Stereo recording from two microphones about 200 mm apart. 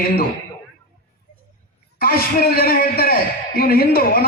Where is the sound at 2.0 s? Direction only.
50° left (ahead or behind).